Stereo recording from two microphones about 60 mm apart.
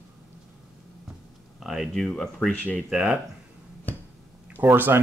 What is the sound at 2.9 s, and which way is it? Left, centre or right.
Speech, centre.